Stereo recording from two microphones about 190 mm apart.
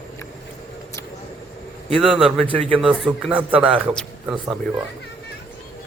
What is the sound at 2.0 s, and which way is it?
A man's voice, centre (ahead or behind).